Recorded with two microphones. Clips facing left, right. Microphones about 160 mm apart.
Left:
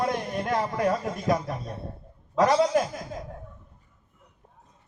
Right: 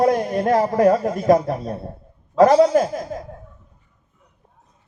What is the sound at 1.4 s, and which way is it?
Speech, 40° right (ahead or behind).